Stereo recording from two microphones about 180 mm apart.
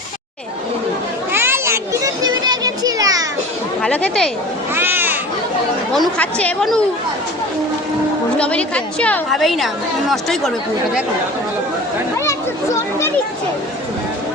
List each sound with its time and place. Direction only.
1.3 s children playing: 15° right (ahead or behind)
3.8 s a woman's voice: 5° left (ahead or behind)
4.7 s a sound: 10° right (ahead or behind)
5.9 s a woman's voice: 5° left (ahead or behind)
8.4 s a woman's voice: 5° left (ahead or behind)
12.2 s children playing: 15° left (ahead or behind)